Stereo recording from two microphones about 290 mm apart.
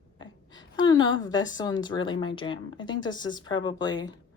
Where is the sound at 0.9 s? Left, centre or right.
Centre.